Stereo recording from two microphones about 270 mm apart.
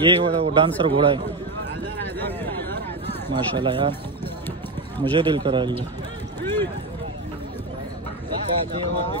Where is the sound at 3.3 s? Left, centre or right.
Centre.